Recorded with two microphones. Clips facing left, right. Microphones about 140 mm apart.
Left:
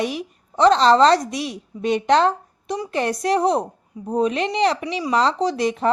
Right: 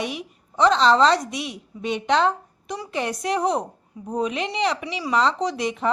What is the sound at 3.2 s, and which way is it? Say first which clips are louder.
A woman's voice: left 4 dB; 35° left (ahead or behind).